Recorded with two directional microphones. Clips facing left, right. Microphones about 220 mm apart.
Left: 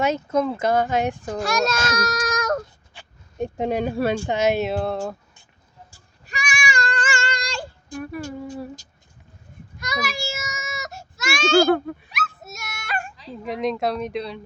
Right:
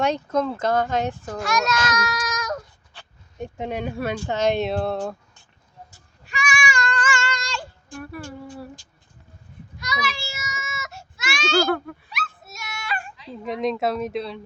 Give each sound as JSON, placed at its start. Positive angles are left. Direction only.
{"t": 0.0, "sound": "speech", "side_deg": 5}
{"t": 1.4, "sound": "speech", "side_deg": 30}
{"t": 2.0, "sound": "child singing", "side_deg": 50}
{"t": 3.3, "sound": "speech", "side_deg": 35}
{"t": 4.3, "sound": "speech", "side_deg": 10}
{"t": 6.2, "sound": "child singing", "side_deg": 35}
{"t": 7.9, "sound": "a sound", "side_deg": 20}
{"t": 9.7, "sound": "baby cry", "side_deg": 50}
{"t": 12.1, "sound": "dog", "side_deg": 45}
{"t": 13.3, "sound": "speech", "side_deg": 0}